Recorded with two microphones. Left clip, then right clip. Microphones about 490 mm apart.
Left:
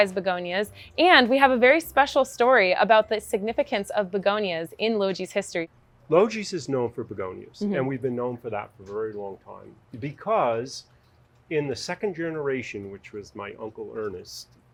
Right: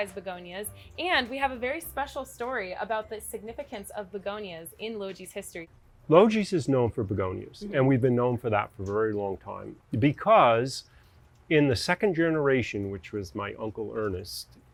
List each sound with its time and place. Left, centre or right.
0.0 s a woman's voice: left
6.1 s speech: right